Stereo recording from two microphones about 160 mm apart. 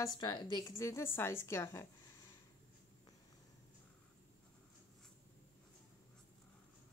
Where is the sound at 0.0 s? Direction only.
25° left (ahead or behind).